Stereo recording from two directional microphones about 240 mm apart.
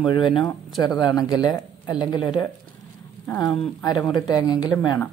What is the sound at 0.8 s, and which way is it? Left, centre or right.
Speech, centre.